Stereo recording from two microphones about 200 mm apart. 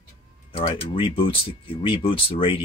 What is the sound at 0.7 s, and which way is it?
Speech, 25° left (ahead or behind).